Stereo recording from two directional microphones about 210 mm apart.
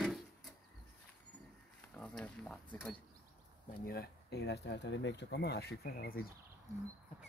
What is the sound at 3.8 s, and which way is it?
Speech, 50° left (ahead or behind).